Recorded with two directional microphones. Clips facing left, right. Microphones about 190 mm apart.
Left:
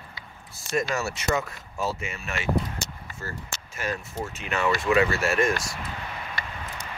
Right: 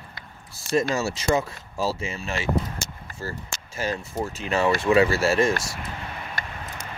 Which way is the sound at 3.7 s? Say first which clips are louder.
Right 4 dB; 30° right (ahead or behind).